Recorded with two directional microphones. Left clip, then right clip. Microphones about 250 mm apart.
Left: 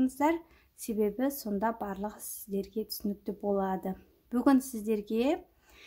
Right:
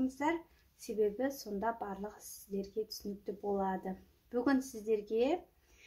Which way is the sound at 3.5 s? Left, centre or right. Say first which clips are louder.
Left 4 dB; left.